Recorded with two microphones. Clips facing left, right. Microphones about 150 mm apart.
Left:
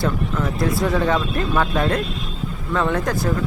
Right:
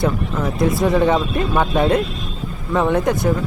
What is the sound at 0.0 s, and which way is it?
Speech, 20° right (ahead or behind).